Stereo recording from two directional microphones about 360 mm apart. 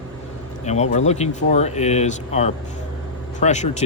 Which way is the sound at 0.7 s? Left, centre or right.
Centre.